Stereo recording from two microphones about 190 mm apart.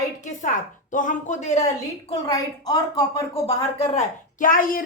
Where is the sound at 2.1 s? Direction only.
20° left (ahead or behind).